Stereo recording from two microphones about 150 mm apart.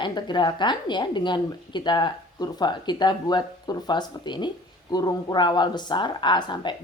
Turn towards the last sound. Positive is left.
turn(degrees=30)  # may be behind; listen again after turning